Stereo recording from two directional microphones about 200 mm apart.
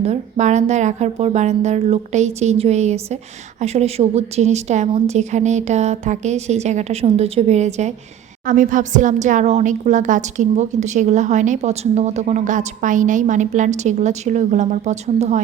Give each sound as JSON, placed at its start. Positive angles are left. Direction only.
{"t": 0.0, "sound": "a woman's voice", "side_deg": -35}